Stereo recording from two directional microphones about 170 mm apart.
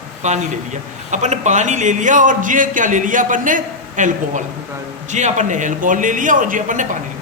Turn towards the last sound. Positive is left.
turn(degrees=-50)  # may be behind; listen again after turning